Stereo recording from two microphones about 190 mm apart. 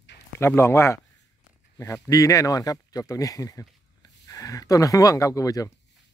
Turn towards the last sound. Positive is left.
turn(degrees=20)  # may be behind; listen again after turning